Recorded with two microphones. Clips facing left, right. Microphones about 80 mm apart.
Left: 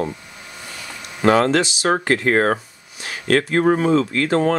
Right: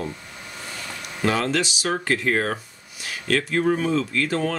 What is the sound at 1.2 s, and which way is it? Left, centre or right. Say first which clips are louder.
Speech: left 7 dB; left.